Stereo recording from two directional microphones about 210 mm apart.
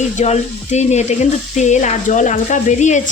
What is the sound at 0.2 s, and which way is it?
Sizzle, 35° left (ahead or behind).